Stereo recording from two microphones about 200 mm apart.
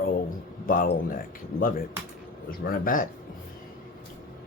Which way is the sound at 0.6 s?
45° left (ahead or behind).